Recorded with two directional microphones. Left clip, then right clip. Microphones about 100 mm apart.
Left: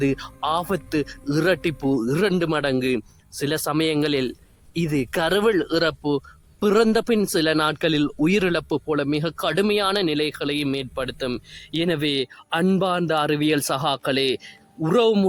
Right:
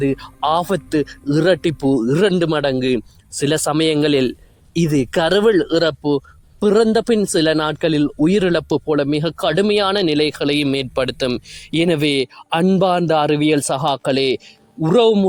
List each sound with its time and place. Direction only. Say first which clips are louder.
0.0 s a man's voice: right 3 dB; 30° right (ahead or behind)
0.3 s speech: right 9 dB; 60° right (ahead or behind); by 2.1 s 40° right (ahead or behind)
2.4 s a man's voice: right 5 dB; 55° right (ahead or behind); by 7.2 s 35° right (ahead or behind)
7.3 s speech: right 4 dB; 50° right (ahead or behind)
7.8 s speech: right 4 dB; 35° right (ahead or behind); by 11.3 s 90° right
11.7 s a man's voice: right 6 dB; 70° right (ahead or behind); by 14.4 s 50° right (ahead or behind)
14.8 s a man's voice: right 5 dB; 35° right (ahead or behind)